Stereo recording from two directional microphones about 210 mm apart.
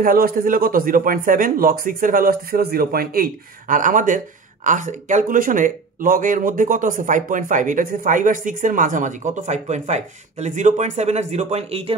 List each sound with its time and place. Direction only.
0.0 s a man's voice: 45° right (ahead or behind)